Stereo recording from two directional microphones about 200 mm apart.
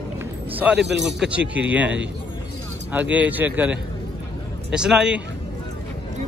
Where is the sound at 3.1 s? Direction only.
10° right (ahead or behind).